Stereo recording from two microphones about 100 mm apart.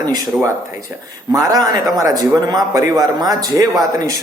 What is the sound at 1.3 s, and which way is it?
A man's voice, 35° right (ahead or behind).